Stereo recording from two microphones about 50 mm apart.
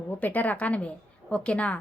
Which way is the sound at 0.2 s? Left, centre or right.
Left.